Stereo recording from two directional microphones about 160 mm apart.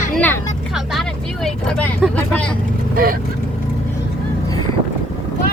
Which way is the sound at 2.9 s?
65° right (ahead or behind).